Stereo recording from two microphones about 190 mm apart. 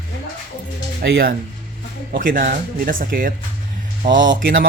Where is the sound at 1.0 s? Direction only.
60° right (ahead or behind).